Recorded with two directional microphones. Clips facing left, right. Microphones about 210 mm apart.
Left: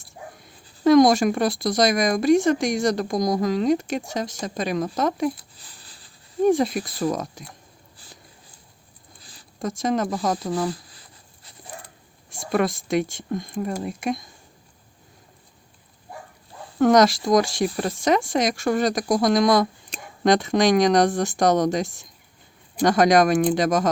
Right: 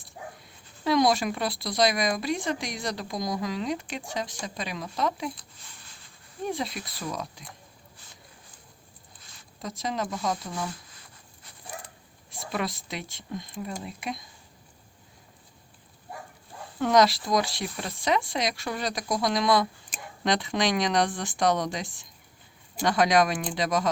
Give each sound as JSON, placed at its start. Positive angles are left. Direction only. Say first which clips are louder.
{"t": 0.9, "sound": "speech", "louder": "left 9 dB", "side_deg": 45}
{"t": 5.5, "sound": "a sound", "louder": "left 2 dB", "side_deg": 35}
{"t": 6.4, "sound": "speech", "louder": "left 12 dB", "side_deg": 50}
{"t": 9.6, "sound": "speech", "louder": "left 8 dB", "side_deg": 50}
{"t": 10.5, "sound": "speech", "louder": "left 9 dB", "side_deg": 35}
{"t": 12.3, "sound": "speech", "louder": "left 9 dB", "side_deg": 50}
{"t": 16.7, "sound": "speech", "louder": "left 6 dB", "side_deg": 45}